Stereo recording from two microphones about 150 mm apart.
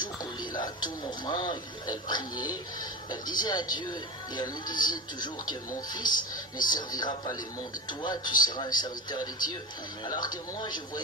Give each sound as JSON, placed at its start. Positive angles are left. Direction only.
{"t": 0.0, "sound": "speech", "side_deg": 30}